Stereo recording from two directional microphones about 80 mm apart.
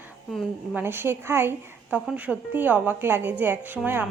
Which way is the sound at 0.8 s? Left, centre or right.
Right.